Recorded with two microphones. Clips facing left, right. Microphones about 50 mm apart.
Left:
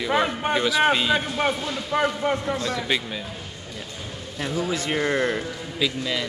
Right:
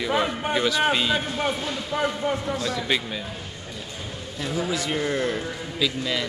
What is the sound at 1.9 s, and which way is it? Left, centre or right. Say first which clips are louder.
Speech: left 3 dB; left.